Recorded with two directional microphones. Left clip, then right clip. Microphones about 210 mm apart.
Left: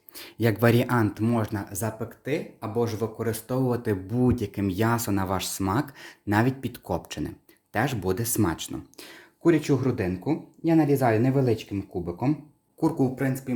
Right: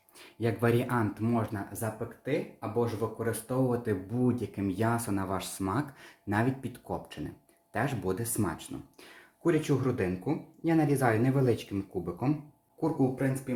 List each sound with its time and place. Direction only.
0.2 s speech: 50° left (ahead or behind); by 11.6 s 30° left (ahead or behind)
12.8 s speech: 55° left (ahead or behind)